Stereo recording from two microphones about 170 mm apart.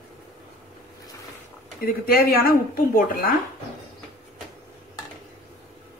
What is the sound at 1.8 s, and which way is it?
Speech, 60° left (ahead or behind).